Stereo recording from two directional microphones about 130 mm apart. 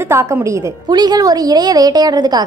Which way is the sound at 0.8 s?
30° right (ahead or behind).